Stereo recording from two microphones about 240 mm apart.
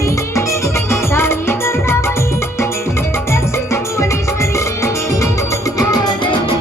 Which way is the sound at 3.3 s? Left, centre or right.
Centre.